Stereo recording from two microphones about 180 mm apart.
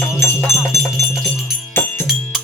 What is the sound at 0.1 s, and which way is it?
Music, 15° left (ahead or behind).